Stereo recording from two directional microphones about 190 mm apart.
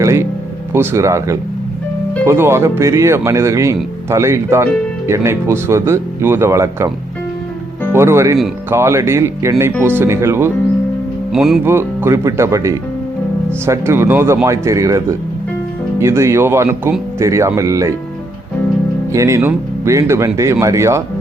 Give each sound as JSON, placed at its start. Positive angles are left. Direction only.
{"t": 0.0, "sound": "speech", "side_deg": -15}
{"t": 7.9, "sound": "speech", "side_deg": -15}
{"t": 11.3, "sound": "speech", "side_deg": 0}
{"t": 11.7, "sound": "speech", "side_deg": -10}
{"t": 19.1, "sound": "speech", "side_deg": -15}